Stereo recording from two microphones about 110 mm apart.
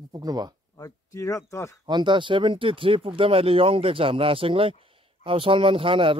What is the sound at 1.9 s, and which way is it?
Speech, 45° right (ahead or behind).